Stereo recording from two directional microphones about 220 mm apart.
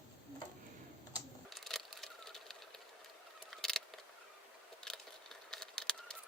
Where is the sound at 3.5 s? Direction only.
Centre (ahead or behind).